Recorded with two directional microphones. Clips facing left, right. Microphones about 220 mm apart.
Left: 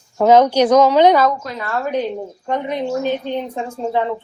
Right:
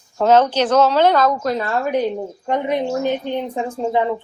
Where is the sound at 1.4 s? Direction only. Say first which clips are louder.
Right 8 dB; 40° right (ahead or behind).